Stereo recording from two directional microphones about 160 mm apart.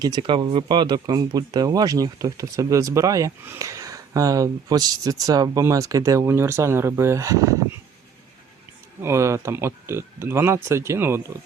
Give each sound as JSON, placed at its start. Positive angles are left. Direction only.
{"t": 0.0, "sound": "speech", "side_deg": -25}
{"t": 9.0, "sound": "speech", "side_deg": -15}